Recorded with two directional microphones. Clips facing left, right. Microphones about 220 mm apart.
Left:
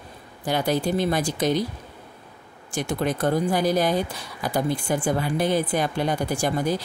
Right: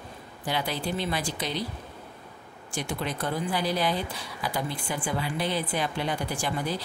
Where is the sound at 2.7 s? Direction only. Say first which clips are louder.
Left 7 dB; 45° left (ahead or behind).